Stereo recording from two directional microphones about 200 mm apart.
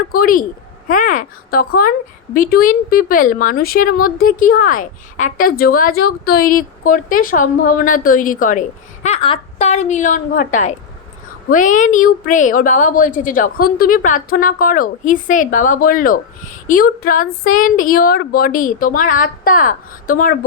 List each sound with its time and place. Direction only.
0.1 s a woman's voice: 45° left (ahead or behind)
9.0 s a woman's voice: 30° left (ahead or behind)